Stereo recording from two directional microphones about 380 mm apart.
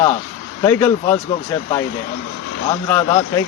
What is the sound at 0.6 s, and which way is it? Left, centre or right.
Speech, centre.